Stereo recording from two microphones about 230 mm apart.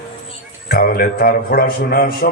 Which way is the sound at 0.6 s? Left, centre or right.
Left.